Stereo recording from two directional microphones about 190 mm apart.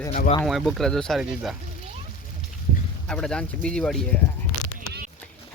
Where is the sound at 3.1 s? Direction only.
5° left (ahead or behind).